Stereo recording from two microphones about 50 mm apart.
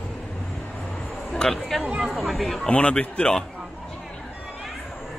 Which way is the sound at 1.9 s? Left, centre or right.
Centre.